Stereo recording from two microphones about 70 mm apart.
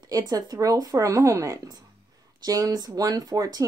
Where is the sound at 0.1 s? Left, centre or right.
Right.